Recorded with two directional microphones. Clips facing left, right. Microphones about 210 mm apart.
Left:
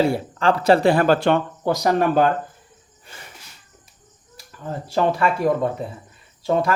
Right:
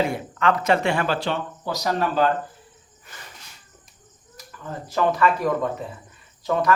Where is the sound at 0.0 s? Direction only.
35° left (ahead or behind); by 2.3 s 55° left (ahead or behind).